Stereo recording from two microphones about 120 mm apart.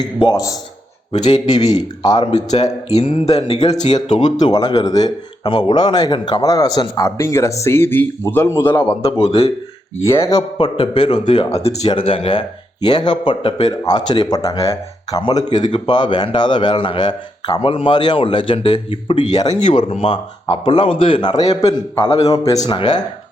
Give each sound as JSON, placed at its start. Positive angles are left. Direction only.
{"t": 0.0, "sound": "speech", "side_deg": 35}
{"t": 2.2, "sound": "speech", "side_deg": 65}
{"t": 4.4, "sound": "speech", "side_deg": 35}
{"t": 7.2, "sound": "speech", "side_deg": 20}
{"t": 9.0, "sound": "speech", "side_deg": 55}
{"t": 10.1, "sound": "speech", "side_deg": 30}
{"t": 10.8, "sound": "speech", "side_deg": 45}
{"t": 11.6, "sound": "speech", "side_deg": 65}
{"t": 11.9, "sound": "speech", "side_deg": 50}